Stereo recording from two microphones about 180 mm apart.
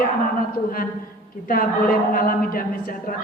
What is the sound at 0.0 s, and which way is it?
Speech, 50° left (ahead or behind).